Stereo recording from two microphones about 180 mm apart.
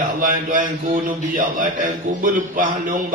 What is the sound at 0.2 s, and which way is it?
A man's voice, 50° right (ahead or behind).